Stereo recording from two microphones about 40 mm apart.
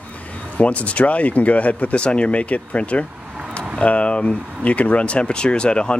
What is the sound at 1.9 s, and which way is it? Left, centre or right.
Speech, left.